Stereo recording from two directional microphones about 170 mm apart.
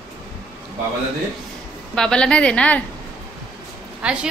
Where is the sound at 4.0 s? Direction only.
5° right (ahead or behind).